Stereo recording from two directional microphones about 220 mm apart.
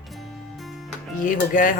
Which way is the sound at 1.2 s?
35° left (ahead or behind).